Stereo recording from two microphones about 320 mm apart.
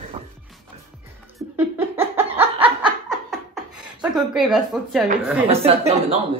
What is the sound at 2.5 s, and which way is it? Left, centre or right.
Snicker, centre.